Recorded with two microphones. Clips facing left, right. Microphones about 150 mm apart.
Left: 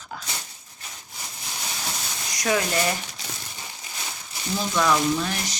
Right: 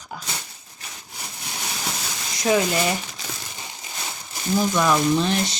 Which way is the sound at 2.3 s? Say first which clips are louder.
Right 4 dB; 25° right (ahead or behind).